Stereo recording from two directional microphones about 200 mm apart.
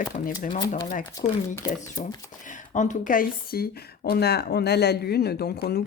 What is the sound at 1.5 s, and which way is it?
Speech, 15° left (ahead or behind).